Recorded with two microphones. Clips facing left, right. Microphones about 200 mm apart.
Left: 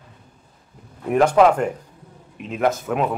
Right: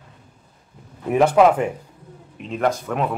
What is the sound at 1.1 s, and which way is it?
Speech, 5° right (ahead or behind).